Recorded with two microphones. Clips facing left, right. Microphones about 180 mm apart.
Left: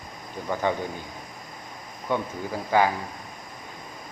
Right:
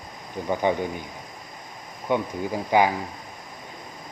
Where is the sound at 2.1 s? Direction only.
15° right (ahead or behind).